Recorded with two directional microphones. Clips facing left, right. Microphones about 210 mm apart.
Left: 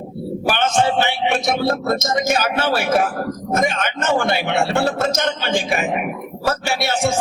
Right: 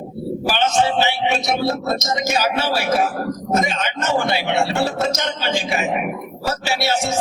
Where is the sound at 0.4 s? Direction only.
55° left (ahead or behind).